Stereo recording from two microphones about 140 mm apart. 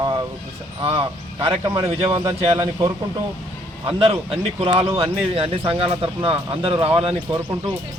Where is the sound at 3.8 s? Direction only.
40° right (ahead or behind).